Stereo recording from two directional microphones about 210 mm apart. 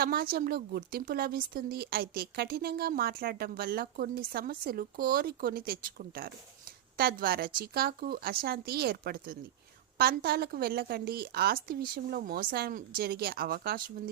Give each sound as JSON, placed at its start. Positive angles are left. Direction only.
{"t": 0.0, "sound": "speech", "side_deg": -45}